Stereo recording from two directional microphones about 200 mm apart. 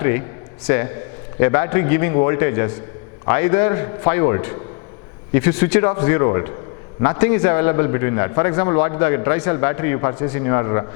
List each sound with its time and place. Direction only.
0.0 s a man's voice: 15° left (ahead or behind)